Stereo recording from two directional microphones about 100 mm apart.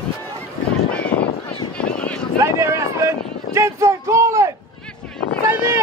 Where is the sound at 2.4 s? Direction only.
30° right (ahead or behind).